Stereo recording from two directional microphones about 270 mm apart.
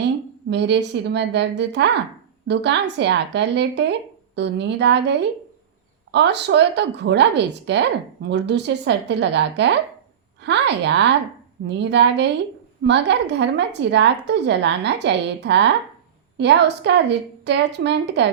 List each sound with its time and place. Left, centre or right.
0.5 s a woman's voice: right